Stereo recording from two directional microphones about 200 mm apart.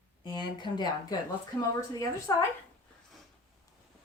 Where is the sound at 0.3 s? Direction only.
25° left (ahead or behind).